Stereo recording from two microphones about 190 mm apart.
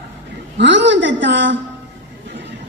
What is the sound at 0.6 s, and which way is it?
Speech, 70° right (ahead or behind).